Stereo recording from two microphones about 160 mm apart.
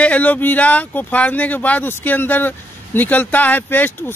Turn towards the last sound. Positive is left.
turn(degrees=10)  # may be behind; listen again after turning